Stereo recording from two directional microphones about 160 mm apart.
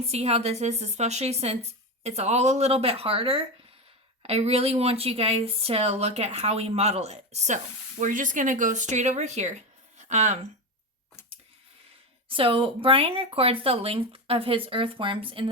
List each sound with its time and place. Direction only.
0.0 s speech: 40° right (ahead or behind)
12.3 s speech: 35° right (ahead or behind)